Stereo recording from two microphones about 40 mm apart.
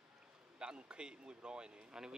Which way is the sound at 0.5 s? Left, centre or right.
Right.